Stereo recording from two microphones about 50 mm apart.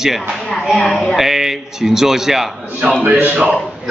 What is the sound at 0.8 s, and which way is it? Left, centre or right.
Speech, centre.